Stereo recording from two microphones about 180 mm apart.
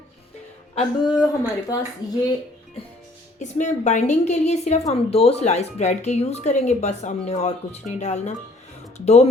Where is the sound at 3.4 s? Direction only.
40° left (ahead or behind).